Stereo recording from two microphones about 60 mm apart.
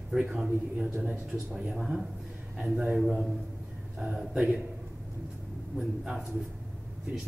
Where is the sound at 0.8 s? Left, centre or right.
Right.